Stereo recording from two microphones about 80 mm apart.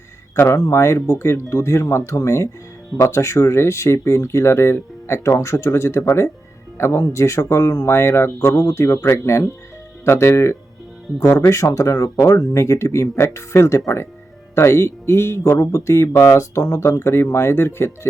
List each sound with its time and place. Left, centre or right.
0.3 s speech: left